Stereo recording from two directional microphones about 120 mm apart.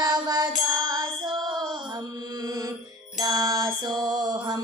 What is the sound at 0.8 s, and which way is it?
Music, 35° right (ahead or behind).